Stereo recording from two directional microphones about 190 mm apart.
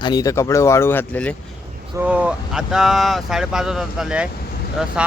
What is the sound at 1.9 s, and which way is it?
Speech, 5° right (ahead or behind).